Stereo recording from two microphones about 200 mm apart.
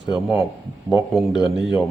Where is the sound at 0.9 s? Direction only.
Centre (ahead or behind).